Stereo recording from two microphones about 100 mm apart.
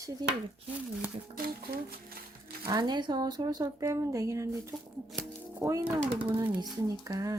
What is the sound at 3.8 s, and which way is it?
Speech, 30° right (ahead or behind).